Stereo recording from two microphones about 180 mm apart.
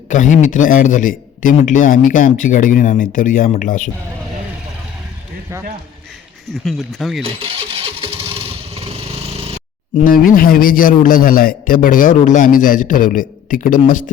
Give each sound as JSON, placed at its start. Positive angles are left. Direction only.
{"t": 0.1, "sound": "a man's voice", "side_deg": 45}
{"t": 6.5, "sound": "speech", "side_deg": 0}
{"t": 7.2, "sound": "vehicle", "side_deg": -30}
{"t": 10.0, "sound": "a man's voice", "side_deg": 50}